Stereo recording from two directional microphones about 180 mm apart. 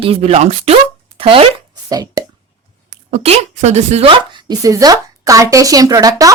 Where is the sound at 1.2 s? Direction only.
30° right (ahead or behind).